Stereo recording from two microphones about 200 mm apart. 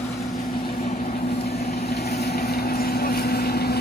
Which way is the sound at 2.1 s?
50° left (ahead or behind).